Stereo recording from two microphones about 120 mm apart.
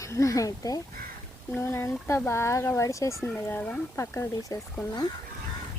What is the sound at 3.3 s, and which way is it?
Speech, 15° left (ahead or behind).